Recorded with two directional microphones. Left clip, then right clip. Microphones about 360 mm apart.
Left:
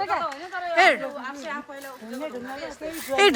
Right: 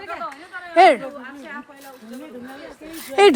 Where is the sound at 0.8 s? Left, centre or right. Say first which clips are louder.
Right 6 dB; centre.